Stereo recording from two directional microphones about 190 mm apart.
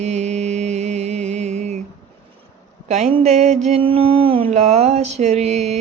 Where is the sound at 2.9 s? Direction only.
35° right (ahead or behind).